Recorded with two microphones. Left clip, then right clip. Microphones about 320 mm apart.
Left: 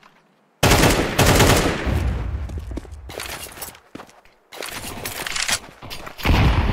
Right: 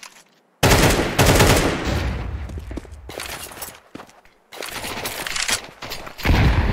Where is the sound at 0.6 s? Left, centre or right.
Centre.